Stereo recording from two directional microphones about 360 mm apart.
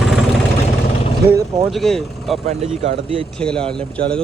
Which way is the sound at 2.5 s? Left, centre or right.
Centre.